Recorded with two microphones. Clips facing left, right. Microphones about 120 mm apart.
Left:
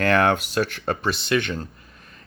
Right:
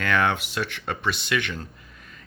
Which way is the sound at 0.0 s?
40° left (ahead or behind).